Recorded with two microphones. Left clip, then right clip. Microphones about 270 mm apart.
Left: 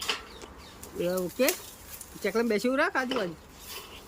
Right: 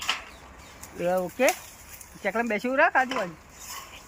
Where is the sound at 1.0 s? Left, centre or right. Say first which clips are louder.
Right 4 dB; centre.